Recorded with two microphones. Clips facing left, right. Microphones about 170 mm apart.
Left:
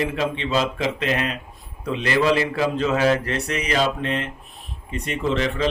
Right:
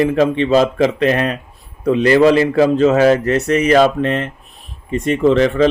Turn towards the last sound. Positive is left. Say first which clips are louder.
# right 10 dB
turn(degrees=-50)  # may be behind; listen again after turning